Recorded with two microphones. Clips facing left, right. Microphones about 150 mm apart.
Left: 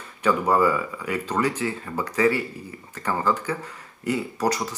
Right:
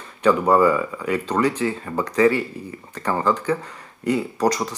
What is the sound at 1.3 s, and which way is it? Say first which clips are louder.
Speech: right 3 dB; 10° left (ahead or behind).